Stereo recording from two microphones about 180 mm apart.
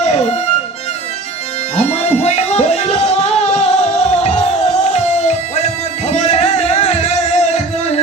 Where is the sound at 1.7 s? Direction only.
40° left (ahead or behind).